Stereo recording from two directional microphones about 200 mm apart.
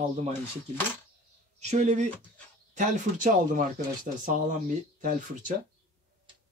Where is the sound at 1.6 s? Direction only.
35° right (ahead or behind).